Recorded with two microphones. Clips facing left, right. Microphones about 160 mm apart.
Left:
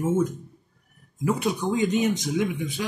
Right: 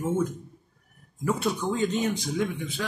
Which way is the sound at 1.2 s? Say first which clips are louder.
Left 2 dB; 15° left (ahead or behind).